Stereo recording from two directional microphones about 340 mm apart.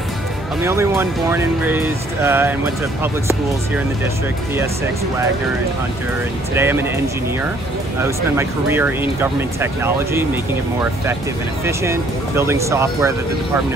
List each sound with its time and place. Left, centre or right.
0.7 s speech: centre
6.5 s speech: centre
8.0 s speech: centre